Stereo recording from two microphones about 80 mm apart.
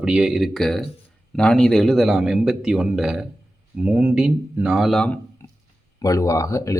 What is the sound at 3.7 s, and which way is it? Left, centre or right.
Speech, centre.